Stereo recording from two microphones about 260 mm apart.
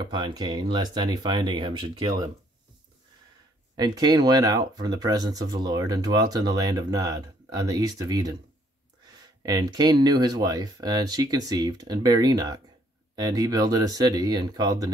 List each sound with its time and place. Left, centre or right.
0.0 s speech: centre
3.7 s speech: centre